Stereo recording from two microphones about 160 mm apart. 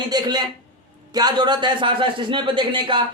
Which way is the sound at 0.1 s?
25° right (ahead or behind).